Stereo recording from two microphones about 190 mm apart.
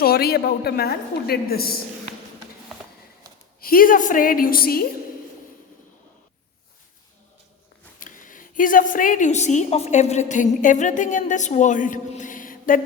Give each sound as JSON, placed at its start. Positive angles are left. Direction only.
{"t": 0.0, "sound": "a woman's voice", "side_deg": 55}
{"t": 3.6, "sound": "a woman's voice", "side_deg": 50}
{"t": 7.9, "sound": "a woman's voice", "side_deg": 45}